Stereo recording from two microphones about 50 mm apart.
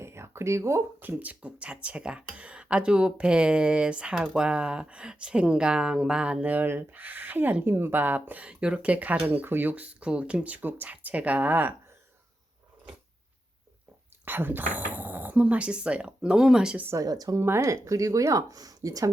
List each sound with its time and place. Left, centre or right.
0.0 s speech: right
1.0 s speech: right; by 6.4 s centre
6.4 s speech: right
8.4 s speech: right
9.5 s speech: right
10.6 s speech: right
11.0 s speech: right
14.3 s speech: right
15.4 s speech: right
16.9 s speech: right